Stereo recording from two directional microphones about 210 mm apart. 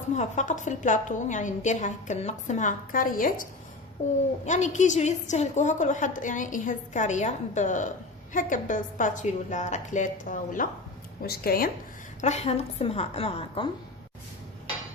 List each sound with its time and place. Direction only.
0.1 s a woman's voice: 35° left (ahead or behind)
4.4 s a woman's voice: 35° left (ahead or behind)
12.2 s a woman's voice: 30° left (ahead or behind)